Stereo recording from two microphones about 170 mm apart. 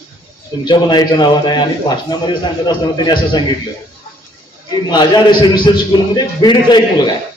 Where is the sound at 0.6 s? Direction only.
25° left (ahead or behind).